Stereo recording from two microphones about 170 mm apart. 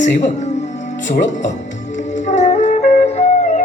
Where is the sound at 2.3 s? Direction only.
45° left (ahead or behind).